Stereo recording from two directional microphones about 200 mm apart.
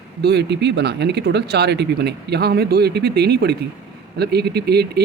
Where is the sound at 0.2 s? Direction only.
55° right (ahead or behind).